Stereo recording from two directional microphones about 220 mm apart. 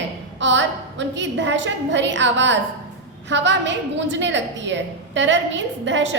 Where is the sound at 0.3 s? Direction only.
55° right (ahead or behind).